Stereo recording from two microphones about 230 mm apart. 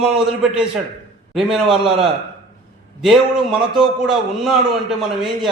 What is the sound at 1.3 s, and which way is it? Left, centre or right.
Speech, centre.